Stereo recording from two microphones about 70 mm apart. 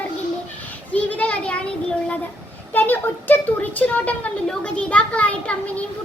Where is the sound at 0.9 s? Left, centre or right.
Left.